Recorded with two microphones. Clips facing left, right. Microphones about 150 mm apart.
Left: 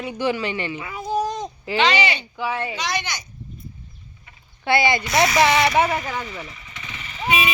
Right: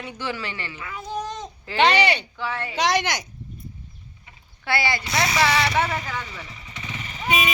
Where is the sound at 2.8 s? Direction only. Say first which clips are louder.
Right 5 dB; 90° right.